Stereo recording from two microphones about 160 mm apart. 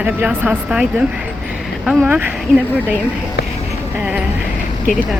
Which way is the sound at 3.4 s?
90° left.